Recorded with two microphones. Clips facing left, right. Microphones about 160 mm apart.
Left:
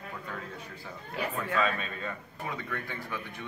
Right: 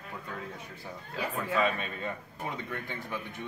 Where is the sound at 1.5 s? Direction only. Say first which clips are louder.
Right 2 dB; 15° right (ahead or behind).